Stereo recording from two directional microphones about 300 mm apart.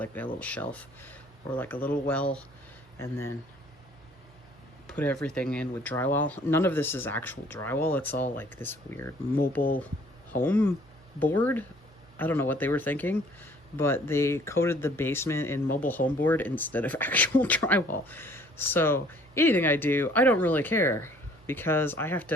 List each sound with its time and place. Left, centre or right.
0.0 s speech: centre
4.9 s speech: centre
9.6 s speech: left
10.4 s speech: centre